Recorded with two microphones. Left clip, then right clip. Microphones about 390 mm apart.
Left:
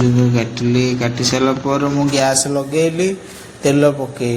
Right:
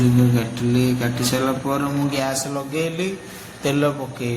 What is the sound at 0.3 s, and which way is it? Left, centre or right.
A man's voice, right.